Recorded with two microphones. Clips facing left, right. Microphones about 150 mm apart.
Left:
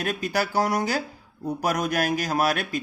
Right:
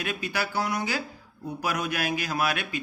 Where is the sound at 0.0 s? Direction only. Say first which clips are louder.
Left 5 dB; 40° left (ahead or behind).